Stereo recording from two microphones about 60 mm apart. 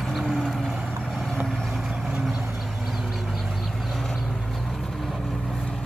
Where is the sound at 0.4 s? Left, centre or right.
Centre.